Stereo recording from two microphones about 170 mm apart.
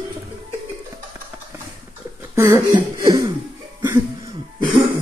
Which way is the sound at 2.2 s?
15° right (ahead or behind).